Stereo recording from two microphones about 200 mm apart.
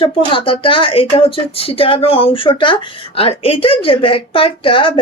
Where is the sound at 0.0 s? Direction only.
25° left (ahead or behind).